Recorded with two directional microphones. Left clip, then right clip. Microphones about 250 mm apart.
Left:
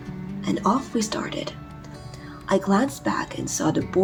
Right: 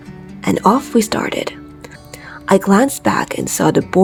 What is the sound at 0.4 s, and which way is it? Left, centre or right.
Speech, right.